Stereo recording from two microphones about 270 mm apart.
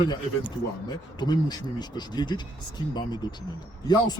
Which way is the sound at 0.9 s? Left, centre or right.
Centre.